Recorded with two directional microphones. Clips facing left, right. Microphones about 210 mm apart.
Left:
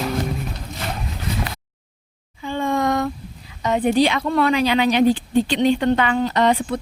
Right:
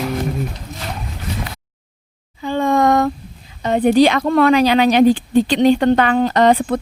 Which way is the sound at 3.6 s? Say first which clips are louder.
Right 5 dB; 35° right (ahead or behind).